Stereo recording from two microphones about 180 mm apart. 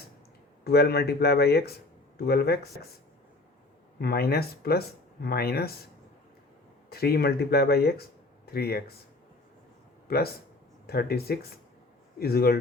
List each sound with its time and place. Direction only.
0.6 s speech: 60° left (ahead or behind)
3.9 s speech: 60° left (ahead or behind)
6.9 s speech: 60° left (ahead or behind)
10.1 s speech: 60° left (ahead or behind)